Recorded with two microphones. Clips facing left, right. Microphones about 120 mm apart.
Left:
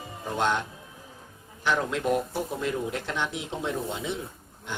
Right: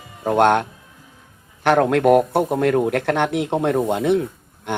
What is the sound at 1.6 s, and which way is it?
A man's voice, 60° right (ahead or behind).